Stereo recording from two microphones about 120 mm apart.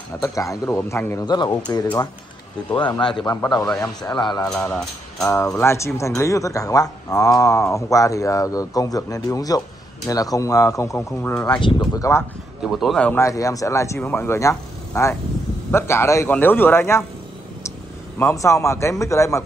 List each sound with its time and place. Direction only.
0.2 s a man's voice: 25° left (ahead or behind)
1.2 s a man's voice: 35° left (ahead or behind)
3.4 s speech: 5° left (ahead or behind)
3.8 s a man's voice: 35° left (ahead or behind)
4.6 s speech: 10° left (ahead or behind)
5.6 s a man's voice: 20° left (ahead or behind)
11.3 s speech: 10° left (ahead or behind)
11.6 s a man's voice: 35° left (ahead or behind)
12.7 s speech: centre (ahead or behind)
13.1 s a man's voice: 25° left (ahead or behind)
18.2 s a man's voice: 25° left (ahead or behind)